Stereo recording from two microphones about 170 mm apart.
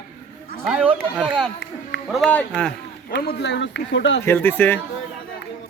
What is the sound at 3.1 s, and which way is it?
A man's voice, 65° left (ahead or behind).